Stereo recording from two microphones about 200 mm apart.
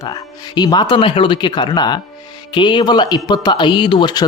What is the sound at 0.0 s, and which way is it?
Speech, 20° left (ahead or behind).